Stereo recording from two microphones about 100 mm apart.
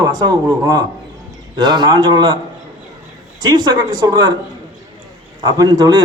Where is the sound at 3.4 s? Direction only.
50° right (ahead or behind).